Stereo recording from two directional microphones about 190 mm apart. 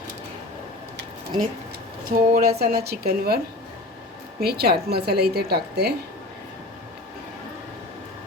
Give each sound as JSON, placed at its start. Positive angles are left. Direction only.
{"t": 2.0, "sound": "a woman's voice", "side_deg": -50}